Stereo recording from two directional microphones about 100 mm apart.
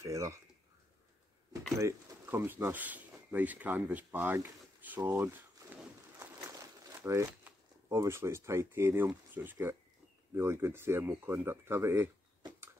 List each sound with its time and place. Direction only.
0.0 s speech: 30° right (ahead or behind)
1.8 s speech: 30° right (ahead or behind)
2.2 s speech: 20° right (ahead or behind)
7.0 s speech: 25° right (ahead or behind)
7.5 s a sound: 15° right (ahead or behind)
7.9 s speech: 30° right (ahead or behind)